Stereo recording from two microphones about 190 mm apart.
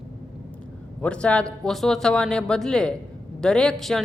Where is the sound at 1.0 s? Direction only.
5° left (ahead or behind).